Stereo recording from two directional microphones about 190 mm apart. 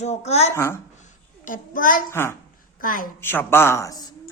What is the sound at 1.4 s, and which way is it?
Speech, 45° left (ahead or behind).